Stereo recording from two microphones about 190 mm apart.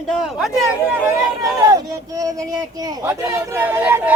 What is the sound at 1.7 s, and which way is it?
Speech, 20° right (ahead or behind).